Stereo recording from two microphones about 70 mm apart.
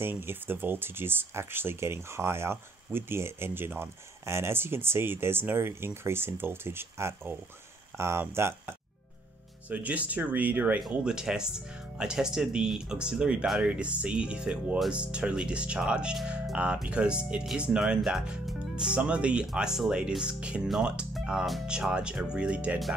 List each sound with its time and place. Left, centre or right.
0.0 s speech: right
9.7 s speech: right
10.9 s speech: centre